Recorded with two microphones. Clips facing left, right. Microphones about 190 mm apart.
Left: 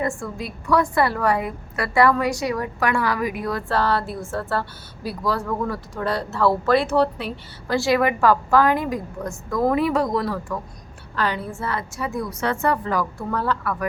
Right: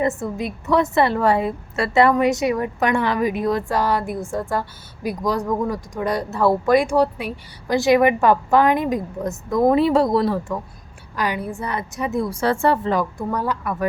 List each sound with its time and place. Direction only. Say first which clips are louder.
0.0 s a woman's voice: right 4 dB; 20° right (ahead or behind)
11.1 s speech: right 1 dB; 15° right (ahead or behind)